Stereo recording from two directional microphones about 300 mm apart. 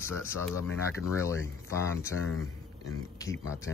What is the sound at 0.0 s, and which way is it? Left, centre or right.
Speech, centre.